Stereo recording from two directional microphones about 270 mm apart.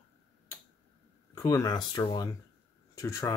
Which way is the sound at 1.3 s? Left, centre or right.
Centre.